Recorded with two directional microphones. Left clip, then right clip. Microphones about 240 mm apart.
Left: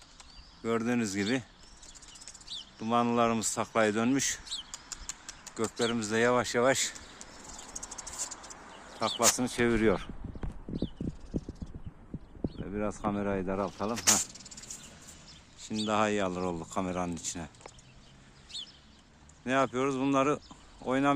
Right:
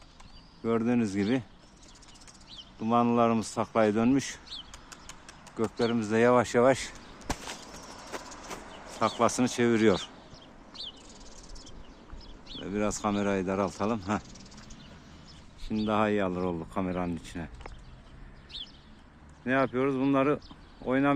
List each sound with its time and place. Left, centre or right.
0.6 s speech: centre
2.7 s speech: centre
4.9 s a sound: centre
5.6 s speech: centre
8.4 s a sound: right
9.0 s speech: centre
12.5 s speech: centre
15.9 s speech: centre
19.5 s speech: centre